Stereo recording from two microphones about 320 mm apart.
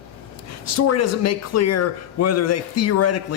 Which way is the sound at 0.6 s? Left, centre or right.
Left.